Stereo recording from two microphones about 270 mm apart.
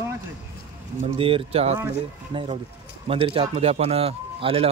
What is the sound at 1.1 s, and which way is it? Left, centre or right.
A man's voice, centre.